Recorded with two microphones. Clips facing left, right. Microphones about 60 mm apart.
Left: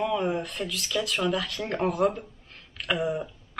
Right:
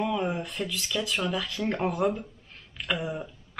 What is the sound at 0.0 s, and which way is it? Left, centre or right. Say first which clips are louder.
Speech: left 2 dB; centre.